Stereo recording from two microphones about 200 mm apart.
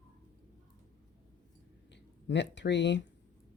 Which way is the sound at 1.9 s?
60° left (ahead or behind).